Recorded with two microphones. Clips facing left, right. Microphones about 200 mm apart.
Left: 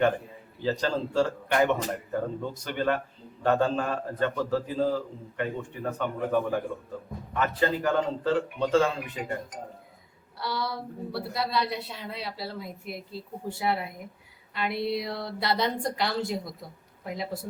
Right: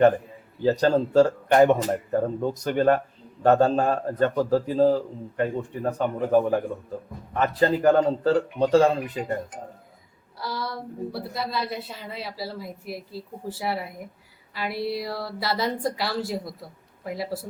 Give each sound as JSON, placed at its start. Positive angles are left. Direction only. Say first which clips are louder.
{"t": 0.6, "sound": "a man's voice", "louder": "right 7 dB", "side_deg": -45}
{"t": 10.4, "sound": "a woman's voice", "louder": "even", "side_deg": 0}